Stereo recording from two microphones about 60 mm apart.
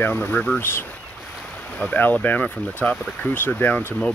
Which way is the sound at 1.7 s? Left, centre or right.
Left.